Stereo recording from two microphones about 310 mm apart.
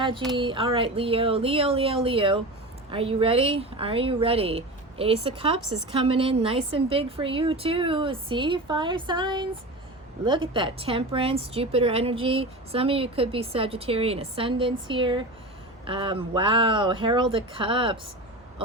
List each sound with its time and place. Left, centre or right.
0.3 s a woman's voice: centre